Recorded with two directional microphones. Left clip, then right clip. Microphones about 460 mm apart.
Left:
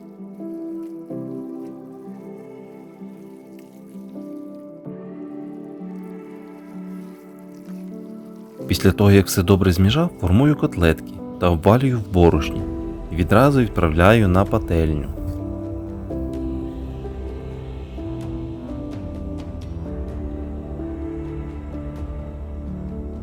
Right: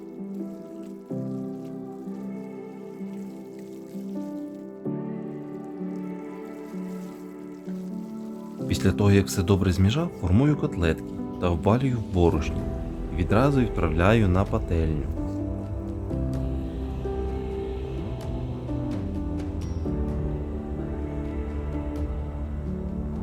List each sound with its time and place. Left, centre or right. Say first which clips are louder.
8.6 s speech: left 7 dB; centre